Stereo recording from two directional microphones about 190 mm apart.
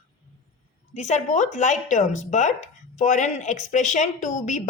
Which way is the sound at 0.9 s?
40° left (ahead or behind).